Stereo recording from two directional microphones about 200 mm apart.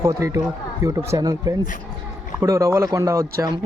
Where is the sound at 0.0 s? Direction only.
15° right (ahead or behind).